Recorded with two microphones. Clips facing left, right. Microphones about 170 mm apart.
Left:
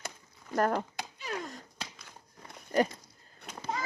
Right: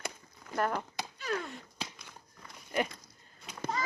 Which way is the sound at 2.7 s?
40° left (ahead or behind).